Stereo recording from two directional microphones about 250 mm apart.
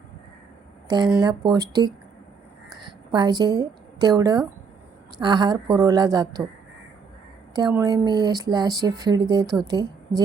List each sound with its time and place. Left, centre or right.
0.9 s speech: centre
3.1 s a woman's voice: centre
7.5 s speech: centre